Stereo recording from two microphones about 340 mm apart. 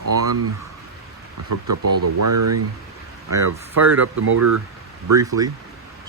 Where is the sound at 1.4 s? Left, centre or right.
Right.